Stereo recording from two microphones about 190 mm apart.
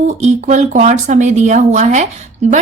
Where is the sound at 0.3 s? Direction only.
35° right (ahead or behind).